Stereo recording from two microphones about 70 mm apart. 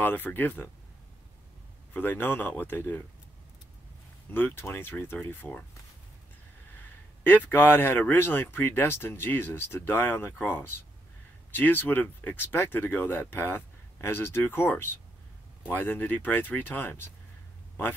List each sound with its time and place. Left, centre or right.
0.0 s speech: left
2.0 s speech: left
4.3 s speech: left
7.2 s speech: left